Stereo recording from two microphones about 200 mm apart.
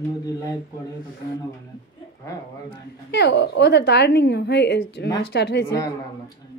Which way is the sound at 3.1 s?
55° left (ahead or behind).